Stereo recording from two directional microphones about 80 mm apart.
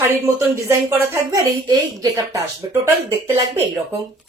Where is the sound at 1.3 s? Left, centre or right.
Right.